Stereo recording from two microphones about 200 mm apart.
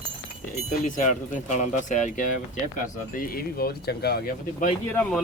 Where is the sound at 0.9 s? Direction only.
40° left (ahead or behind).